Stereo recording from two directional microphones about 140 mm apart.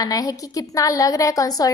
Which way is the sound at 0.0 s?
25° left (ahead or behind).